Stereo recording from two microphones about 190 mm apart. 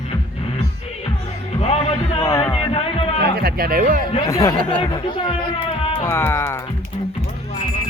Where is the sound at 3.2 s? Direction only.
55° right (ahead or behind).